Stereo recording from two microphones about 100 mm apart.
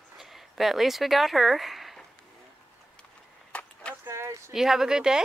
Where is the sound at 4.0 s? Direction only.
30° right (ahead or behind).